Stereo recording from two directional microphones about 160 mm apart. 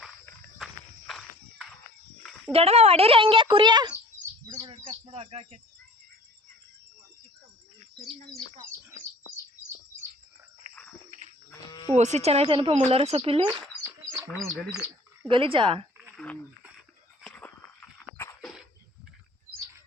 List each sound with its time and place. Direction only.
0.6 s walk: centre (ahead or behind)
2.5 s speech: 40° right (ahead or behind)
4.4 s bird: 35° right (ahead or behind)
11.9 s speech: 45° right (ahead or behind)
14.3 s speech: centre (ahead or behind)
15.3 s speech: 35° right (ahead or behind)
16.1 s a sound: 10° left (ahead or behind)